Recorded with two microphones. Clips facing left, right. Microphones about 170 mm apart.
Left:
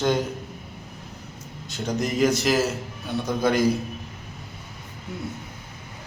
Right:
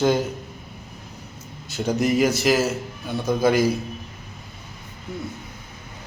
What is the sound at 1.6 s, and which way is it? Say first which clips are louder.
A man's voice: right 5 dB; 5° right (ahead or behind).